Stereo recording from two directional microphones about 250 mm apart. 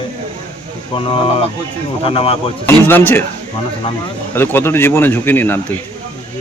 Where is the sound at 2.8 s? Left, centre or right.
Centre.